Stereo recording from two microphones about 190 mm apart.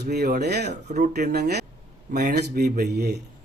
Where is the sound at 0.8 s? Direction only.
40° right (ahead or behind).